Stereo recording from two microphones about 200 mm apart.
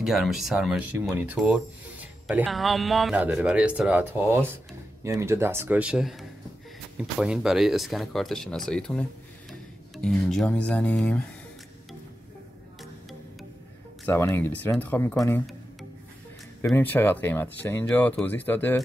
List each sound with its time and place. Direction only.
0.0 s speech: centre (ahead or behind)
10.0 s speech: 5° left (ahead or behind)
14.0 s speech: 10° left (ahead or behind)
16.6 s speech: 10° left (ahead or behind)